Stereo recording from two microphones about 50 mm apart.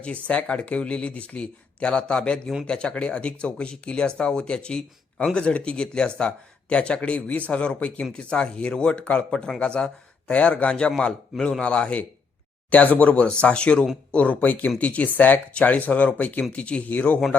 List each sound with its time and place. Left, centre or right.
0.0 s speech: left